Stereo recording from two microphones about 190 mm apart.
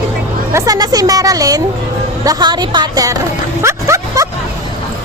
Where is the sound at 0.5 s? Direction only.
20° right (ahead or behind).